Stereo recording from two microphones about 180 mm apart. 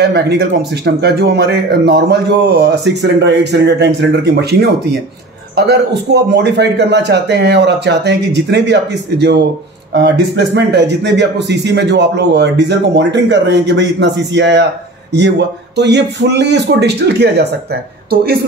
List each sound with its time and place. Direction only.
0.0 s a man's voice: 65° right (ahead or behind)